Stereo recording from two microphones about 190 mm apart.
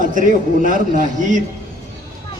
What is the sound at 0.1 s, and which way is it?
A man's voice, 45° right (ahead or behind).